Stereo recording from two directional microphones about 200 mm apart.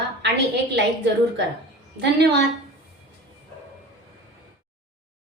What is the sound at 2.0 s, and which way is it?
Speech, 60° right (ahead or behind).